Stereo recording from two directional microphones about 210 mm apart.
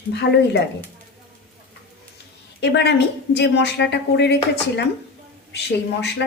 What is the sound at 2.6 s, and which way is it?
A woman's voice, 55° left (ahead or behind).